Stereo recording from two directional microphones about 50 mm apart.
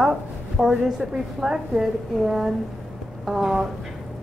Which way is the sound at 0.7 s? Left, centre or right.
Centre.